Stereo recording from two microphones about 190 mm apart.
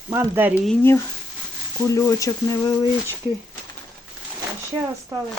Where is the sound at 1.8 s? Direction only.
15° left (ahead or behind).